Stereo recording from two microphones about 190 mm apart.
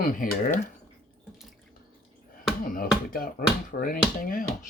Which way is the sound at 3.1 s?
50° left (ahead or behind).